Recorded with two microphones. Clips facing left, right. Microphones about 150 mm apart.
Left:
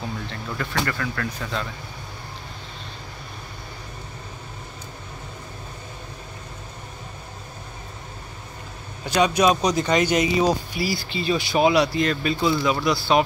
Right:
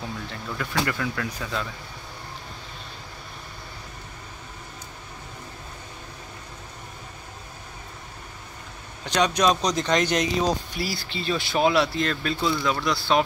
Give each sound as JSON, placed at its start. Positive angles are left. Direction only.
{"t": 0.0, "sound": "speech", "side_deg": 0}
{"t": 9.0, "sound": "speech", "side_deg": 5}